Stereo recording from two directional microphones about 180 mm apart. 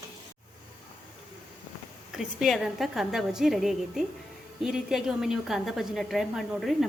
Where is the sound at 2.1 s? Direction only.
5° right (ahead or behind).